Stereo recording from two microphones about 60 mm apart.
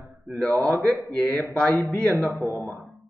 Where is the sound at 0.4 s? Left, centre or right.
Centre.